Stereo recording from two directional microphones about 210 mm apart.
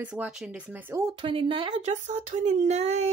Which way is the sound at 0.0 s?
5° right (ahead or behind).